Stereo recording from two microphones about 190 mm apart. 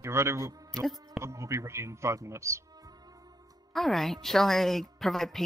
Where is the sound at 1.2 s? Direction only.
15° right (ahead or behind).